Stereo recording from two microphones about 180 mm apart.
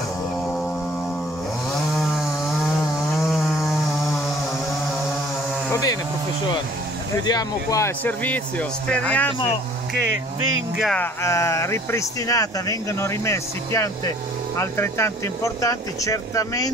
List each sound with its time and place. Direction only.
3.3 s chainsaw: centre (ahead or behind)
5.7 s a sound: 20° left (ahead or behind)
7.2 s speech: 20° left (ahead or behind)
9.9 s speech: 90° right
10.8 s speech: 5° left (ahead or behind)
11.2 s speech: 15° left (ahead or behind)